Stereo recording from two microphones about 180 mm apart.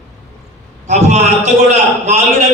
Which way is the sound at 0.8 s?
40° right (ahead or behind).